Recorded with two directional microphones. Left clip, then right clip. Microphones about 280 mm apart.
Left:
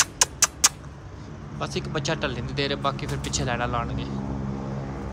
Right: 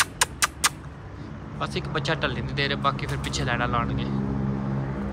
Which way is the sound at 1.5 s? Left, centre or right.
Centre.